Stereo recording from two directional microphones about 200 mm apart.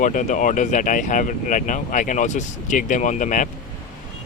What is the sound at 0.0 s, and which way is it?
Speech, 40° left (ahead or behind).